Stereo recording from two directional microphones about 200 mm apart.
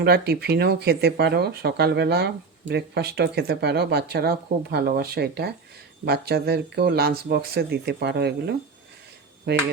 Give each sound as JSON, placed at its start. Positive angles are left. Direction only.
{"t": 0.0, "sound": "speech", "side_deg": -50}